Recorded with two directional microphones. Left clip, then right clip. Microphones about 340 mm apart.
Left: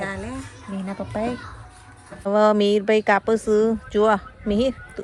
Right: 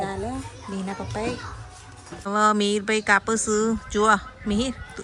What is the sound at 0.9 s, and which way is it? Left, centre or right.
A woman's voice, centre.